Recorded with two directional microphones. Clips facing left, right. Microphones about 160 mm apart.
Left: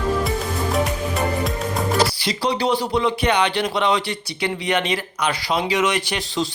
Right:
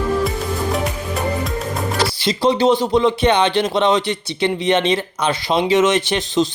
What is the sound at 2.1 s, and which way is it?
Speech, 25° right (ahead or behind).